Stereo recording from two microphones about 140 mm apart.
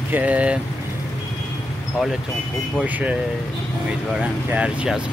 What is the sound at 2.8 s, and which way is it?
Speech, 10° right (ahead or behind).